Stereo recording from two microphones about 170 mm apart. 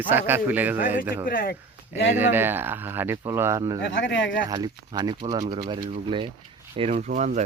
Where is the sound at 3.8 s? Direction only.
90° left.